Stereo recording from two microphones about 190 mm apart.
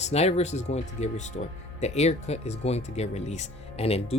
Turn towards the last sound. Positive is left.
turn(degrees=30)  # may be behind; listen again after turning